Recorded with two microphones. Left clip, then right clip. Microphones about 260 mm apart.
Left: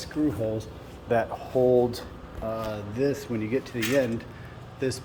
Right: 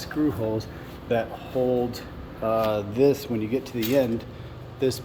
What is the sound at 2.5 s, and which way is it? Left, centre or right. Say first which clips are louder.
Speech: right 8 dB; centre.